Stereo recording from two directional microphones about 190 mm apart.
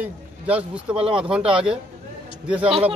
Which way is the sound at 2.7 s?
30° right (ahead or behind).